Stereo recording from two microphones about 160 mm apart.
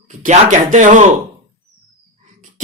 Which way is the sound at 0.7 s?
50° right (ahead or behind).